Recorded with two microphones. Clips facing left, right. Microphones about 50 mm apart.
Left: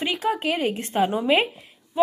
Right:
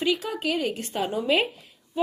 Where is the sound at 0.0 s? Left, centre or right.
Left.